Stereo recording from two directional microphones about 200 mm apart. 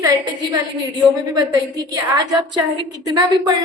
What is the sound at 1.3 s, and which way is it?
A woman's voice, 20° right (ahead or behind).